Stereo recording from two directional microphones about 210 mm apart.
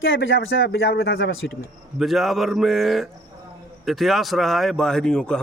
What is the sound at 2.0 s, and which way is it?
Speech, centre (ahead or behind).